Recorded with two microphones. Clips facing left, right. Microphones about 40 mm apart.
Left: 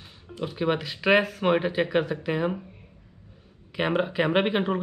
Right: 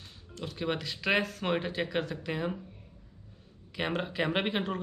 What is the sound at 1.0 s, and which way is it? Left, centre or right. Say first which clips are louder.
Speech: left 8 dB; centre.